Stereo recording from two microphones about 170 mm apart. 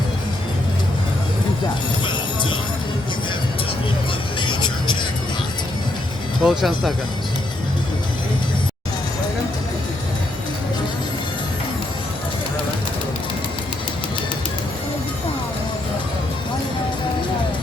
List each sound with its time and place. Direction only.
2.0 s music: 30° left (ahead or behind)
4.4 s vehicle: 30° left (ahead or behind)
6.4 s speech: centre (ahead or behind)